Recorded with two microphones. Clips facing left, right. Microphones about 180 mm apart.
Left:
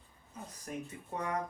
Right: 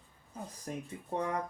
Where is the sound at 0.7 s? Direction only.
30° right (ahead or behind).